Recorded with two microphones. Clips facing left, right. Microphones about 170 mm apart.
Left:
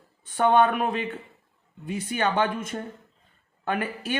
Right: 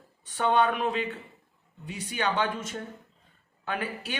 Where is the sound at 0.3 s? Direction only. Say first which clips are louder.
Left 4 dB; 50° left (ahead or behind).